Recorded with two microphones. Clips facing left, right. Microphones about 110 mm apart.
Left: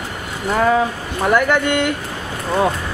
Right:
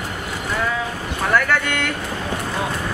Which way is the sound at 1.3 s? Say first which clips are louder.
Left 4 dB; 15° left (ahead or behind).